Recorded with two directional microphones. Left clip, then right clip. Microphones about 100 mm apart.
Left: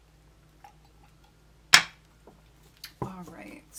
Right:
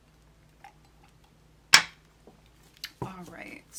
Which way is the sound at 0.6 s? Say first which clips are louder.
Right 1 dB; 10° right (ahead or behind).